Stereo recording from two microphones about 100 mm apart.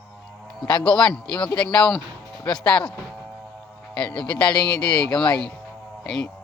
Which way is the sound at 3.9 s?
10° left (ahead or behind).